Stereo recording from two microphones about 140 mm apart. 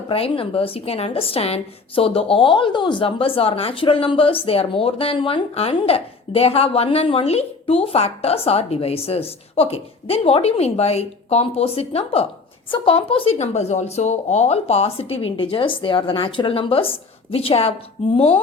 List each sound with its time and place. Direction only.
0.1 s a woman's voice: 40° left (ahead or behind)